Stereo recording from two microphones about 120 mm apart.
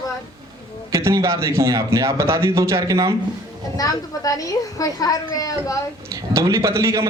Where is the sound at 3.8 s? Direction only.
30° left (ahead or behind).